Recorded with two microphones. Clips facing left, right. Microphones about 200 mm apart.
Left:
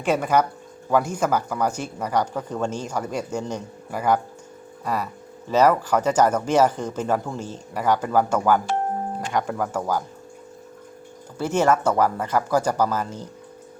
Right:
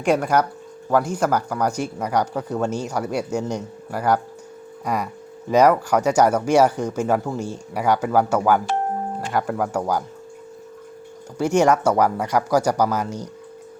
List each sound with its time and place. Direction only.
0.1 s speech: 10° right (ahead or behind)
0.9 s speech: 10° left (ahead or behind)
1.2 s speech: 10° right (ahead or behind)
5.5 s speech: 10° right (ahead or behind)
11.3 s speech: 15° right (ahead or behind)